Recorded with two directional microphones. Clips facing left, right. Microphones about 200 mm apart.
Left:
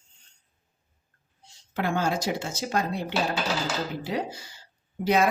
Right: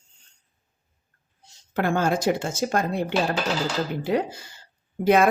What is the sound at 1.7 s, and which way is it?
Speech, 50° right (ahead or behind).